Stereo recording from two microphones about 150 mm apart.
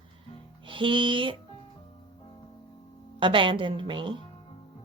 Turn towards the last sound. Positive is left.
turn(degrees=-35)  # may be behind; listen again after turning